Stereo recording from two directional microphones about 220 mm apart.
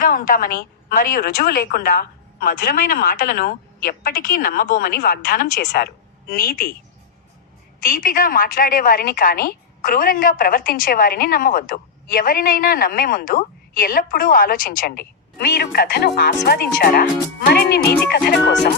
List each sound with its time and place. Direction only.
0.0 s a woman's voice: 40° left (ahead or behind)
7.8 s a woman's voice: 40° left (ahead or behind)